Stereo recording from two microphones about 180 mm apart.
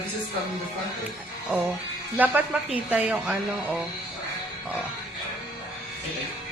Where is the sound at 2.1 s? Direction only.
10° right (ahead or behind).